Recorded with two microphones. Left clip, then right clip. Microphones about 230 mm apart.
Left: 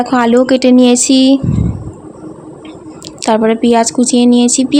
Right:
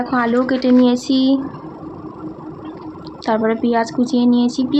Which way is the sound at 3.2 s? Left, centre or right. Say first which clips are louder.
Left 6 dB; left.